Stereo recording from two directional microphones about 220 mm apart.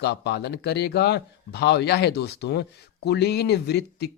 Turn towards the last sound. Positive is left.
turn(degrees=50)  # may be behind; listen again after turning